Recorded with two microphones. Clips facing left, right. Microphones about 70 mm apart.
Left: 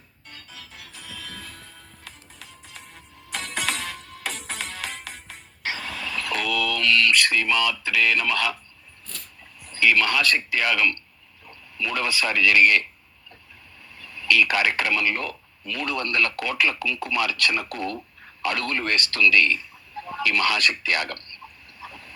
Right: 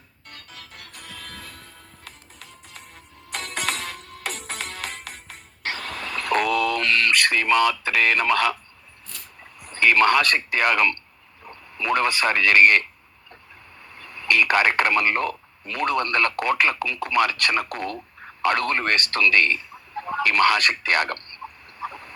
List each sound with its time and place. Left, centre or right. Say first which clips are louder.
0.3 s music: right 1 dB; right
9.6 s speech: right 3 dB; right
13.9 s speech: even; right
20.0 s a sound: right 4 dB; right